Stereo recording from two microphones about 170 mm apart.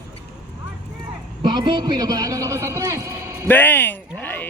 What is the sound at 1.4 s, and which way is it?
A man's voice, 30° right (ahead or behind).